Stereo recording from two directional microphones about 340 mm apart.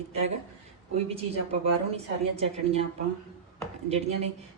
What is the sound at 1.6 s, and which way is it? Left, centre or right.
A woman's voice, centre.